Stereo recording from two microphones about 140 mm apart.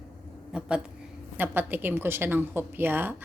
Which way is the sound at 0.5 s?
5° right (ahead or behind).